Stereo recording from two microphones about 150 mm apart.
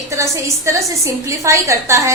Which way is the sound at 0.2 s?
20° right (ahead or behind).